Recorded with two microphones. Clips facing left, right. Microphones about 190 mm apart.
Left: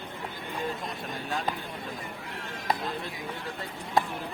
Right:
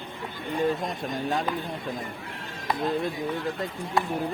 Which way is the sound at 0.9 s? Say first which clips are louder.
Right 6 dB; 45° right (ahead or behind).